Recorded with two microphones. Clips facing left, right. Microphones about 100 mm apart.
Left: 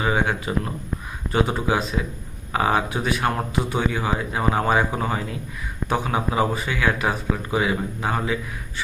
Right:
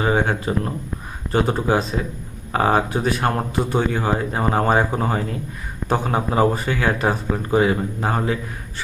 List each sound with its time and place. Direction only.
0.0 s speech: 35° right (ahead or behind)